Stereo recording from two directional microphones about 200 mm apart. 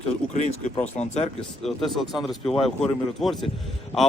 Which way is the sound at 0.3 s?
35° left (ahead or behind).